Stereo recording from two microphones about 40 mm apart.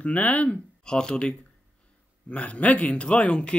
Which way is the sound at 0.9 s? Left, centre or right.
Left.